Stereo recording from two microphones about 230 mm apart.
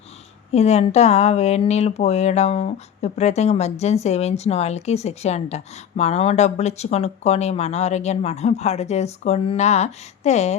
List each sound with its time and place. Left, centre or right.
0.5 s speech: left